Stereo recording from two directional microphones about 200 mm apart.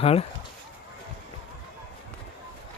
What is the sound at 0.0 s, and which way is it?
Speech, 30° left (ahead or behind).